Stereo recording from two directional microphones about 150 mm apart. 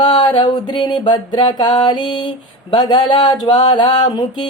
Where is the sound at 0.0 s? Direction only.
30° left (ahead or behind).